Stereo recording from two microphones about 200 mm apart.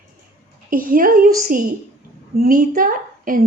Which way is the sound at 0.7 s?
45° right (ahead or behind).